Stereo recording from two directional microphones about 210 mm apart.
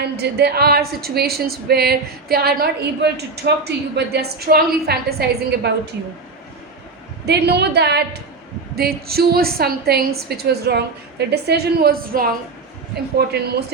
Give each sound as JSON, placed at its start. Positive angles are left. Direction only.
{"t": 0.0, "sound": "a woman's voice", "side_deg": -50}
{"t": 7.3, "sound": "a woman's voice", "side_deg": -50}
{"t": 13.3, "sound": "a woman's voice", "side_deg": -50}